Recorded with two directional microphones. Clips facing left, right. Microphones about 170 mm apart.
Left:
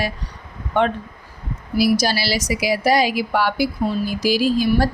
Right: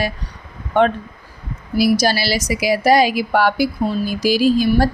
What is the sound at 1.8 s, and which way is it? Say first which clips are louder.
Speech: right 2 dB; 50° right (ahead or behind).